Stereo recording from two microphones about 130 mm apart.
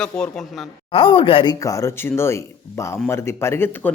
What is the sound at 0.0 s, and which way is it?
Speech, 5° left (ahead or behind).